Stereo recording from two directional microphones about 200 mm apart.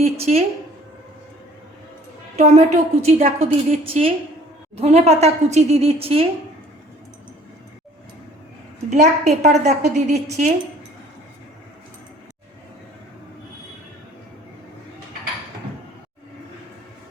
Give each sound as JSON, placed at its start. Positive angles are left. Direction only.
{"t": 0.0, "sound": "a woman's voice", "side_deg": -30}
{"t": 2.3, "sound": "a woman's voice", "side_deg": -35}
{"t": 8.9, "sound": "a woman's voice", "side_deg": -35}